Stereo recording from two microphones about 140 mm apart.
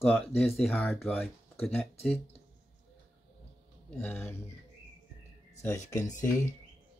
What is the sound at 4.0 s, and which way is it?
Speech, 15° left (ahead or behind).